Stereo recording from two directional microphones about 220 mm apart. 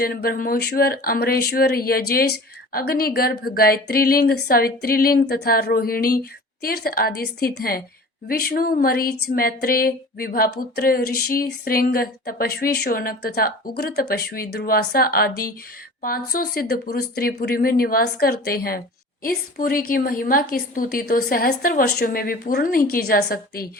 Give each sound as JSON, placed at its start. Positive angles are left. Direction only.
{"t": 0.0, "sound": "a woman's voice", "side_deg": 45}